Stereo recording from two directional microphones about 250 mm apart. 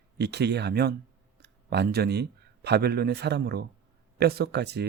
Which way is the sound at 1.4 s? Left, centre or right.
Right.